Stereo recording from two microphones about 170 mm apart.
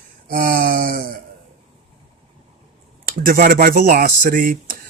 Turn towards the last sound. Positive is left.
turn(degrees=-55)  # may be behind; listen again after turning